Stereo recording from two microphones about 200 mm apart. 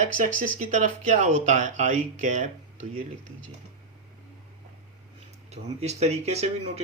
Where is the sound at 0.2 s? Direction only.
40° right (ahead or behind).